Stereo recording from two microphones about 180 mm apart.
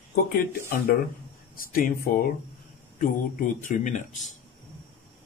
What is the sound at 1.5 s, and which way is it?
Speech, 50° left (ahead or behind).